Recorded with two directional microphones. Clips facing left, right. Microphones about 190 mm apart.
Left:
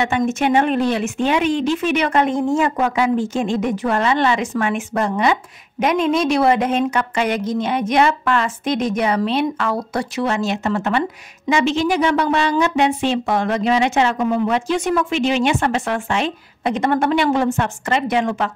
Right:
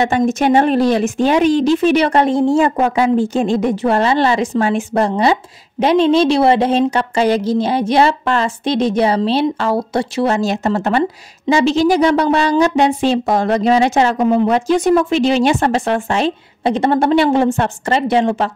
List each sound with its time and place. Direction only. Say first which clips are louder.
0.0 s speech: right 4 dB; 40° right (ahead or behind)